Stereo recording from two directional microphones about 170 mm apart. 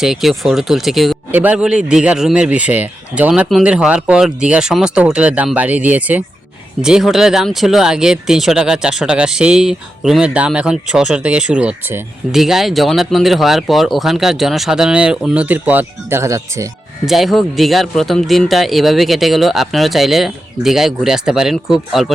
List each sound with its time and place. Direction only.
0.0 s speech: centre (ahead or behind); by 16.6 s 15° right (ahead or behind)
17.1 s speech: centre (ahead or behind)